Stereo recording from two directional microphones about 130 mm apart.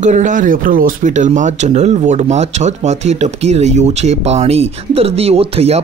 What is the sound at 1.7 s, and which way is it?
Speech, 60° right (ahead or behind).